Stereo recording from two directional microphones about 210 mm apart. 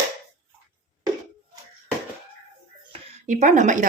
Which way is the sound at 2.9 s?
35° right (ahead or behind).